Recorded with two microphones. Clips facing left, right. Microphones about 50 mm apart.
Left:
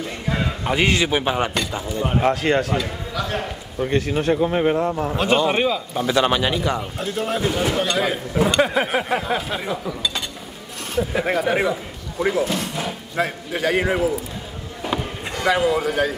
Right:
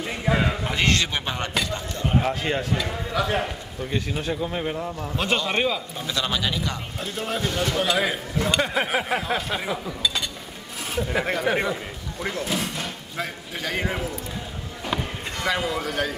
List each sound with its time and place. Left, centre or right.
0.0 s a sound: centre
0.7 s a man's voice: centre
3.1 s a man's voice: centre
4.3 s speech: left
5.1 s speech: centre
5.9 s a man's voice: left
7.0 s speech: centre
7.8 s speech: centre
13.5 s a man's voice: centre
14.8 s chop: centre